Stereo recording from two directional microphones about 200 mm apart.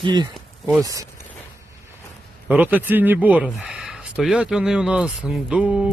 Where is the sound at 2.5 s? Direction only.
10° right (ahead or behind).